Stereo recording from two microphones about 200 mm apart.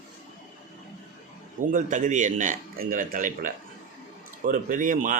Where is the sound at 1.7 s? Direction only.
40° right (ahead or behind).